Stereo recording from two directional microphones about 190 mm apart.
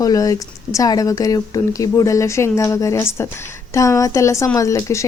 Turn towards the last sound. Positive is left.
turn(degrees=15)  # may be behind; listen again after turning